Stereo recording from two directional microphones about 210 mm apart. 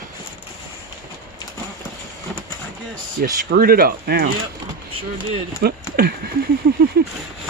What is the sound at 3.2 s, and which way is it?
Speech, 45° right (ahead or behind).